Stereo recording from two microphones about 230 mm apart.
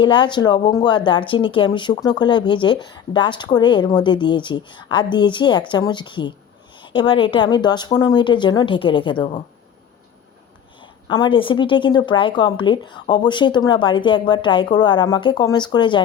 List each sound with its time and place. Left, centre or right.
0.0 s a woman's voice: left
10.8 s a woman's voice: left